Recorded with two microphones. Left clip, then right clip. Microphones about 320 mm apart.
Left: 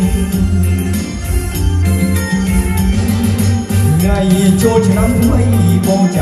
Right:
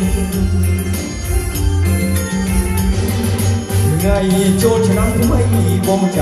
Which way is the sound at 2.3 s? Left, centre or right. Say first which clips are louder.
Left 3 dB; centre.